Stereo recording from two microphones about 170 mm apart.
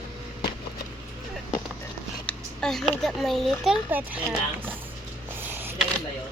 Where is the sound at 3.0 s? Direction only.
Centre (ahead or behind).